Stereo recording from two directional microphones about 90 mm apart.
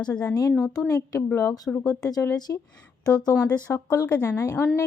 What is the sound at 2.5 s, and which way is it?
Speech, 30° left (ahead or behind).